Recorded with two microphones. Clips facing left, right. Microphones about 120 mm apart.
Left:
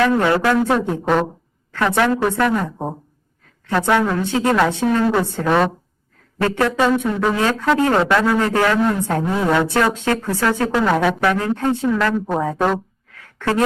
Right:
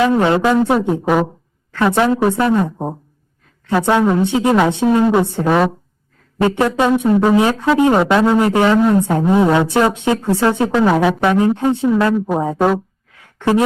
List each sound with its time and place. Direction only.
0.0 s a woman's voice: 25° right (ahead or behind)
3.8 s a woman's voice: 20° right (ahead or behind)
5.5 s speech: 5° right (ahead or behind)
6.4 s a woman's voice: 20° right (ahead or behind)
10.9 s speech: 5° right (ahead or behind)
11.2 s a woman's voice: 20° right (ahead or behind)
12.1 s speech: 5° right (ahead or behind)
12.4 s a woman's voice: 25° right (ahead or behind)